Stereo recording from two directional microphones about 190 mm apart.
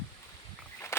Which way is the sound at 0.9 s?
15° left (ahead or behind).